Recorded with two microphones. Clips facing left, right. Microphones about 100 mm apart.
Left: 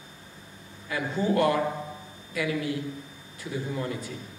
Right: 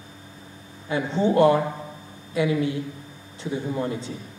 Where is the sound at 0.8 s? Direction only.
25° right (ahead or behind).